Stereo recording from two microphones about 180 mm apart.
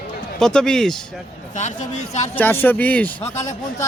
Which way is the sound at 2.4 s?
10° left (ahead or behind).